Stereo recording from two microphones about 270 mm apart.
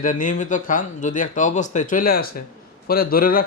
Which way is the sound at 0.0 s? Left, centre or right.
Left.